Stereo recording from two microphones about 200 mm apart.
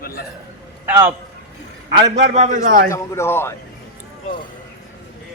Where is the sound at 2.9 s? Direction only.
10° left (ahead or behind).